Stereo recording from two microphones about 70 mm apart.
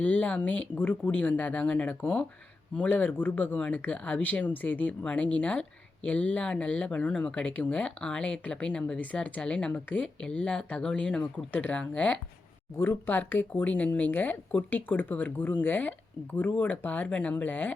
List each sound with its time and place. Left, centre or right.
0.0 s speech: left
12.7 s speech: left